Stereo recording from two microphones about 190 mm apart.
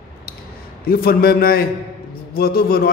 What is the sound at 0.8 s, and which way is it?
A man's voice, 50° left (ahead or behind).